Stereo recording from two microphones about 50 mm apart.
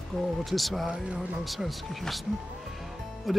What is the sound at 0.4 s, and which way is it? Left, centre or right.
Speech, centre.